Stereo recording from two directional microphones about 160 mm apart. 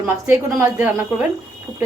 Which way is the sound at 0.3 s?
10° right (ahead or behind).